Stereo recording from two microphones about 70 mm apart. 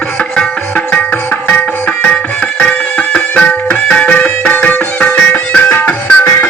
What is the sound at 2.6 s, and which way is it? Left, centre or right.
Music, centre.